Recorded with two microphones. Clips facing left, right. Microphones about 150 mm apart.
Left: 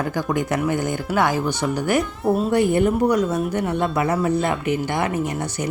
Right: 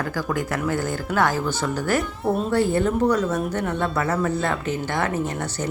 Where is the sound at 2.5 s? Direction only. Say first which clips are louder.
Left 2 dB; 15° left (ahead or behind).